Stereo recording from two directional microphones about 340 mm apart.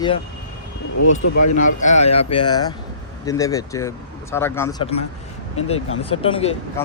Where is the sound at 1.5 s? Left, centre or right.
Left.